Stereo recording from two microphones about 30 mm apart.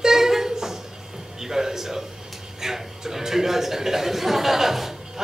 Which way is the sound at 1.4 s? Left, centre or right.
Centre.